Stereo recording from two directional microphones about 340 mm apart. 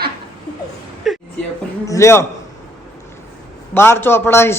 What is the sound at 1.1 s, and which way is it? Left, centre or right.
A woman's voice, centre.